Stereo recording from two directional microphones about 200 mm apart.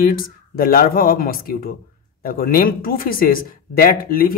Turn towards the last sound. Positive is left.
turn(degrees=45)  # may be behind; listen again after turning